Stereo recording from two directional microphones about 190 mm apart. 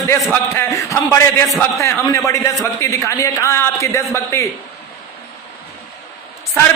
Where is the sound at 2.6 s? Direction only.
15° left (ahead or behind).